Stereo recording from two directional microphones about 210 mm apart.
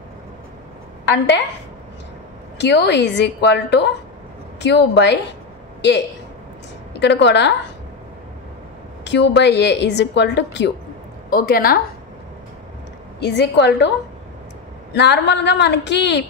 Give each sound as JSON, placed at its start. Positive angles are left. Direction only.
{"t": 1.0, "sound": "a woman's voice", "side_deg": 55}
{"t": 2.6, "sound": "a woman's voice", "side_deg": 55}
{"t": 9.0, "sound": "a woman's voice", "side_deg": 55}
{"t": 11.2, "sound": "a woman's voice", "side_deg": 45}
{"t": 13.2, "sound": "a woman's voice", "side_deg": 55}
{"t": 15.0, "sound": "a woman's voice", "side_deg": 55}